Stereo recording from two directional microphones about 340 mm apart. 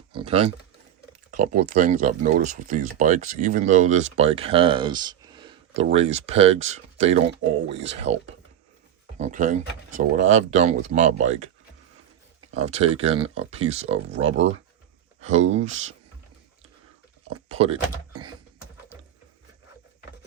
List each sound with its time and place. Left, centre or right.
0.1 s speech: centre
9.1 s speech: right
12.5 s speech: centre
17.2 s speech: centre